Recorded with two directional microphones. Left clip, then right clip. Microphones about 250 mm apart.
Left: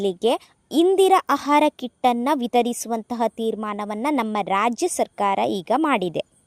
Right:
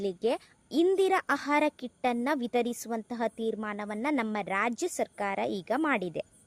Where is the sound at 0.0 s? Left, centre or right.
Left.